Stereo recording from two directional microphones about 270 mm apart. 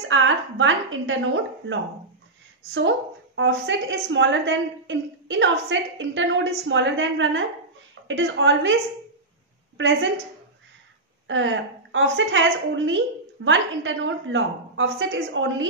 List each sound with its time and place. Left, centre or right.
0.1 s a woman's voice: right
3.3 s a woman's voice: right
9.8 s a woman's voice: right
11.2 s a woman's voice: right